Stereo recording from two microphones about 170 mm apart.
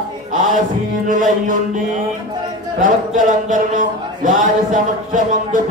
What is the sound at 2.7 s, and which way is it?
A man's voice, 50° right (ahead or behind).